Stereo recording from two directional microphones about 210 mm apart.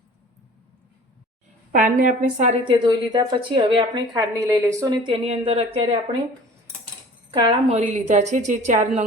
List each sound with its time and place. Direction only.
1.7 s a woman's voice: 40° right (ahead or behind)
7.3 s a woman's voice: 25° right (ahead or behind)